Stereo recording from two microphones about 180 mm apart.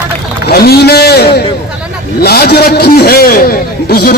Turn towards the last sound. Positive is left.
turn(degrees=60)  # may be behind; listen again after turning